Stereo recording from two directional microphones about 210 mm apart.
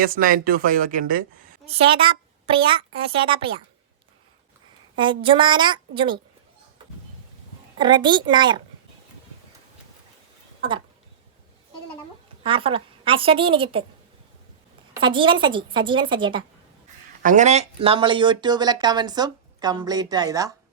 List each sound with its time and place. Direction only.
0.0 s speech: 40° right (ahead or behind)
1.6 s speech: 25° right (ahead or behind)
4.9 s speech: 25° right (ahead or behind)
7.8 s speech: 20° right (ahead or behind)
10.6 s speech: 25° right (ahead or behind)
12.5 s speech: 25° right (ahead or behind)
14.9 s speech: 25° right (ahead or behind)
17.2 s speech: 35° right (ahead or behind); by 20.5 s 15° right (ahead or behind)